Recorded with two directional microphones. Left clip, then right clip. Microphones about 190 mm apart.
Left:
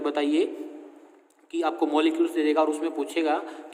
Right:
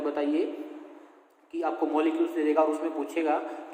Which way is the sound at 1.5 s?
65° left (ahead or behind).